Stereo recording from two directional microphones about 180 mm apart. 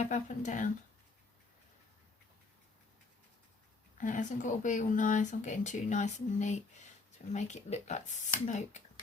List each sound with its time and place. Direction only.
0.0 s speech: 40° left (ahead or behind)
4.0 s speech: 45° left (ahead or behind)